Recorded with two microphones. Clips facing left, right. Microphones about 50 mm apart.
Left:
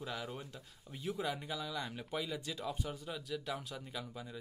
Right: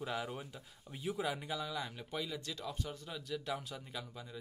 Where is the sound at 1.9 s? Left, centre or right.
Centre.